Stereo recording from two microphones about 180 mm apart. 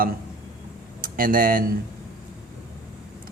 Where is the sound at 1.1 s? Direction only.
50° right (ahead or behind).